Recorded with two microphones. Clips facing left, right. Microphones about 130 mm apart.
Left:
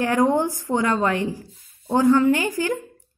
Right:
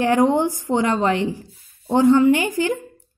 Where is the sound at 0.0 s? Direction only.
20° right (ahead or behind).